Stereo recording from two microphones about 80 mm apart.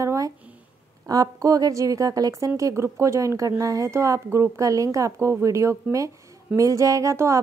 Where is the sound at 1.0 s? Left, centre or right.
Right.